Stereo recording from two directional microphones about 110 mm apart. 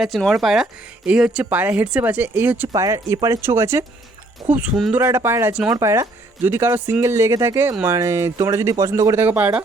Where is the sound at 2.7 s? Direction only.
30° right (ahead or behind).